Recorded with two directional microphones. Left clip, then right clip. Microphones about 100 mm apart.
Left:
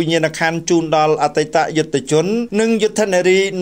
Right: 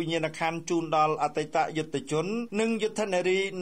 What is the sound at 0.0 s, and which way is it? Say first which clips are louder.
Speech: left 13 dB; 25° left (ahead or behind).